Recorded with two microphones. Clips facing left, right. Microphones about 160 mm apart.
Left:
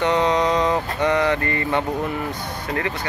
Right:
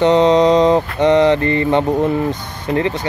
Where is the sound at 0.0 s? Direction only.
25° right (ahead or behind).